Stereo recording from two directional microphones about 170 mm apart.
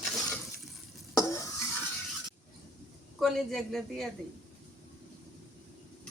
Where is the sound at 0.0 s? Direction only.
Centre (ahead or behind).